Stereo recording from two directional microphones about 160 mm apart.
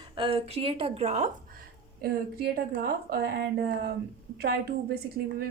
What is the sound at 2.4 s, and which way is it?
A woman's voice, 75° right (ahead or behind).